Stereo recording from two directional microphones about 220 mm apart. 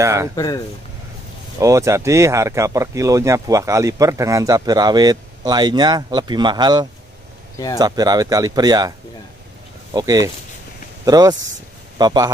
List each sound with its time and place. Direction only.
0.0 s speech: 15° right (ahead or behind)
1.6 s speech: 15° right (ahead or behind)
7.5 s speech: 15° left (ahead or behind)
7.8 s speech: 15° right (ahead or behind)
9.9 s speech: 15° right (ahead or behind)